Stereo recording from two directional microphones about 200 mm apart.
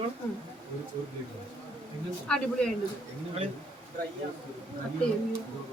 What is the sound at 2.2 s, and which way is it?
Speech, 5° left (ahead or behind).